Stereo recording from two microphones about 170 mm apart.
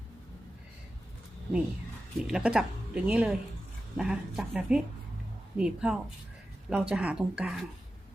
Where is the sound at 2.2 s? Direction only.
5° right (ahead or behind).